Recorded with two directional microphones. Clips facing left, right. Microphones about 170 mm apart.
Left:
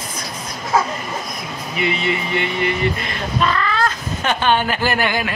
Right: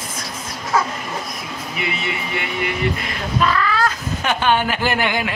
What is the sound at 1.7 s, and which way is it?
Speech, 5° right (ahead or behind).